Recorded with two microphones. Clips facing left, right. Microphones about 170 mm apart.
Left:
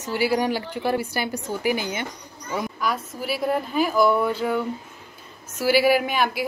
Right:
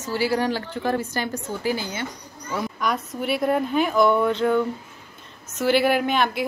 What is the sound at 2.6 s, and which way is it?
A woman's voice, 5° left (ahead or behind).